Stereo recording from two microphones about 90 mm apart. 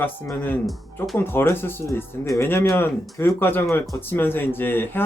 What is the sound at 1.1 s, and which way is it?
Speech, 25° left (ahead or behind).